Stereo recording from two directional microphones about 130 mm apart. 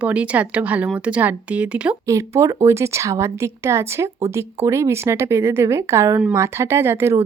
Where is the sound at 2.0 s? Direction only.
20° right (ahead or behind).